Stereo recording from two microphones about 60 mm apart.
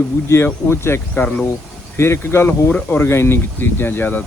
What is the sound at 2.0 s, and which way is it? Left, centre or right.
Speech, left.